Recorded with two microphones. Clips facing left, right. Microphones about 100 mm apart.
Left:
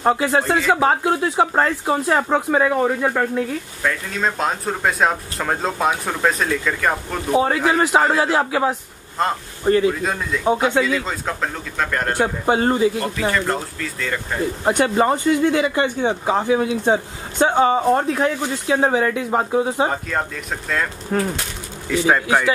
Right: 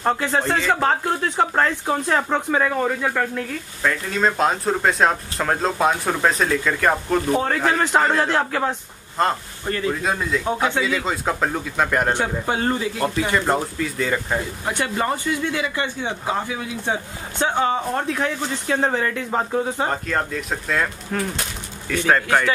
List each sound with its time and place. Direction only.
0.0 s speech: 5° left (ahead or behind)
3.8 s speech: centre (ahead or behind)
12.1 s speech: 15° left (ahead or behind)
13.3 s speech: 15° right (ahead or behind)
14.7 s speech: 20° left (ahead or behind)
15.4 s speech: 40° left (ahead or behind)
16.3 s speech: 30° left (ahead or behind)
18.1 s speech: 10° left (ahead or behind)
21.1 s speech: 20° left (ahead or behind)